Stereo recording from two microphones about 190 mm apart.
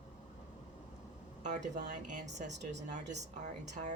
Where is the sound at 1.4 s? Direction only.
40° right (ahead or behind).